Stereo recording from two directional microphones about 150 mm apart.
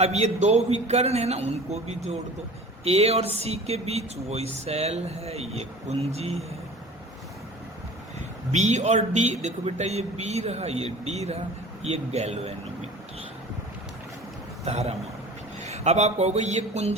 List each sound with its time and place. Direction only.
0.0 s speech: 45° right (ahead or behind)
8.5 s speech: 50° right (ahead or behind)
14.6 s a man's voice: 45° right (ahead or behind)